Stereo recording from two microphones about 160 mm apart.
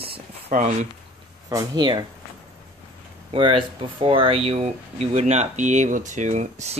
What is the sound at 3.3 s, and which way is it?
Speech, 35° right (ahead or behind).